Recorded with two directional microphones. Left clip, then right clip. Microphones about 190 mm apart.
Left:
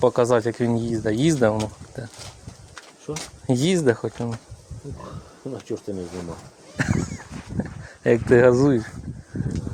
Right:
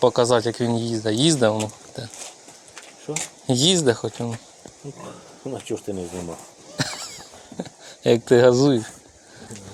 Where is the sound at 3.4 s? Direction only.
15° left (ahead or behind).